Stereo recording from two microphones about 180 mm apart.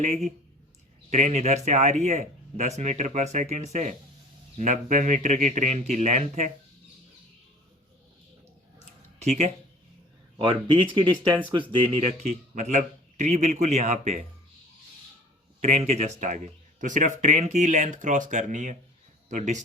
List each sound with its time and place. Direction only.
1.1 s speech: 40° right (ahead or behind)
9.1 s speech: 40° right (ahead or behind)
10.3 s speech: 30° right (ahead or behind)
15.6 s speech: 40° right (ahead or behind)